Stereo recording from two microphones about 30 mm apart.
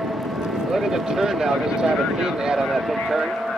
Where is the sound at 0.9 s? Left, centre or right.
Centre.